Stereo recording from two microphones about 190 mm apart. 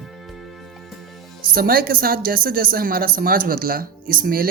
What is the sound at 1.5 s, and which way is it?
Speech, 50° right (ahead or behind).